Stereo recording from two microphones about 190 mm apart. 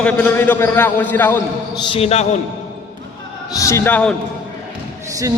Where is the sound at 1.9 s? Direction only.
30° left (ahead or behind).